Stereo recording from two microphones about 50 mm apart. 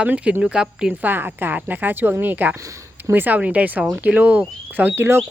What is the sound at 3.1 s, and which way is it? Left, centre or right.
Speech, right.